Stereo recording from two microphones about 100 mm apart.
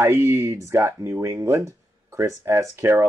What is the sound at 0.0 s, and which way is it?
Speech, 30° right (ahead or behind).